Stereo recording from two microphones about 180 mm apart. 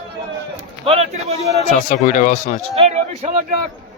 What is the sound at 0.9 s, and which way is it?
Speech, 35° right (ahead or behind).